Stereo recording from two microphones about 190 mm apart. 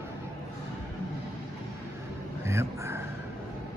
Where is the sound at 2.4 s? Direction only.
15° right (ahead or behind).